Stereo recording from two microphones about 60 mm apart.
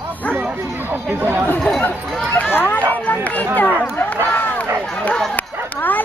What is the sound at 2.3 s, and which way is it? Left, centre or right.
Speech, left.